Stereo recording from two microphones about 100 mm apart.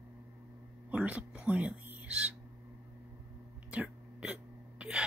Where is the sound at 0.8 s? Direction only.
15° right (ahead or behind).